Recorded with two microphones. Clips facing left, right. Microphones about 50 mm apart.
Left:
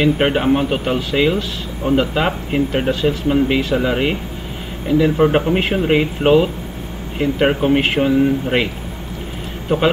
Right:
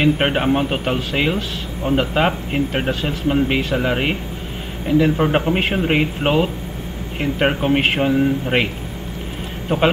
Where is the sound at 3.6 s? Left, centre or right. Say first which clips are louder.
Left 2 dB; right.